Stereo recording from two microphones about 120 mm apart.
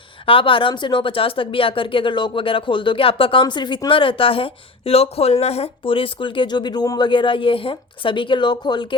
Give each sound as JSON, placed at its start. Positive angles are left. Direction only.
{"t": 0.3, "sound": "speech", "side_deg": 45}